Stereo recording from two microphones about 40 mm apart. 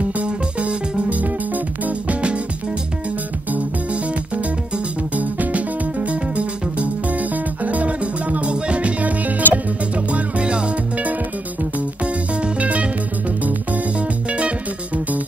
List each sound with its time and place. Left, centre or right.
0.2 s music: right
5.1 s music: right
12.0 s music: right
13.9 s music: right